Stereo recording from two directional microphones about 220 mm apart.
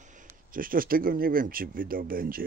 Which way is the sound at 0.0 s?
35° right (ahead or behind).